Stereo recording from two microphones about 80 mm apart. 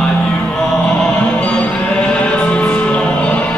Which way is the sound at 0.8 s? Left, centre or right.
Centre.